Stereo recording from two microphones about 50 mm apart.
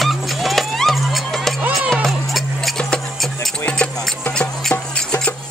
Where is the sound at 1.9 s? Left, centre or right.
Centre.